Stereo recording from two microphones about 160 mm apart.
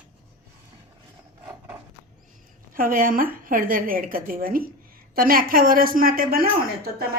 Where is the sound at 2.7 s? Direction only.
60° right (ahead or behind).